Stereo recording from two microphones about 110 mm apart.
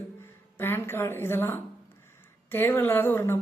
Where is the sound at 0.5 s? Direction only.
20° left (ahead or behind).